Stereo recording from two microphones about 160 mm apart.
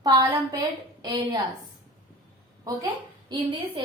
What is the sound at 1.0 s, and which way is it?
Speech, 25° right (ahead or behind).